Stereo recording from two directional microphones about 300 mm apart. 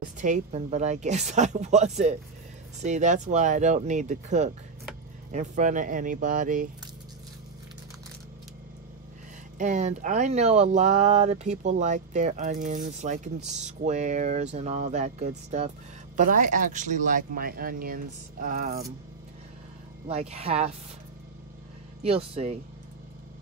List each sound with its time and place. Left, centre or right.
0.2 s speech: right
9.6 s speech: right
20.1 s speech: right
22.0 s speech: centre